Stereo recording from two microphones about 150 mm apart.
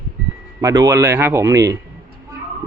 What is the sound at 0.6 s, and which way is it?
A man's voice, 20° right (ahead or behind).